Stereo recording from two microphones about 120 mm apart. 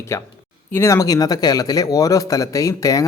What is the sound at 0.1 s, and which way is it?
Speech, 25° left (ahead or behind).